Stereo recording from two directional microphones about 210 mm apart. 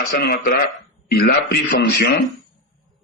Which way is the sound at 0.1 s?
45° left (ahead or behind).